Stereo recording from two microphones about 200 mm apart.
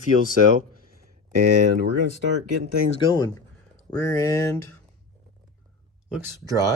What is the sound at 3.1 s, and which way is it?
Speech, 20° left (ahead or behind).